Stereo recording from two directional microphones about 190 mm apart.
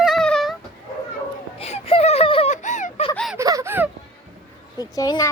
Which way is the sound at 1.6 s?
30° left (ahead or behind).